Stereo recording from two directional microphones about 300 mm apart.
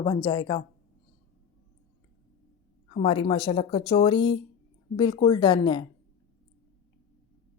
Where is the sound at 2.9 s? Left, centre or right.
Centre.